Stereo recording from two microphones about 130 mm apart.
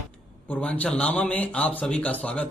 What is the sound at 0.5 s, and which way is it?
Speech, 10° left (ahead or behind).